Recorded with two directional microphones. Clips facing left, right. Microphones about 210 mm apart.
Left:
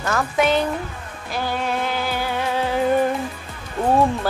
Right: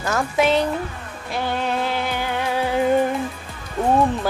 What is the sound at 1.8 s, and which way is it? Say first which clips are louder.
Music: right 1 dB; 30° right (ahead or behind).